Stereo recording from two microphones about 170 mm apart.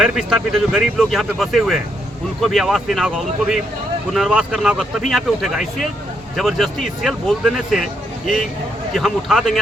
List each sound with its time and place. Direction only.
0.0 s speech: 5° right (ahead or behind)
8.9 s speech: centre (ahead or behind)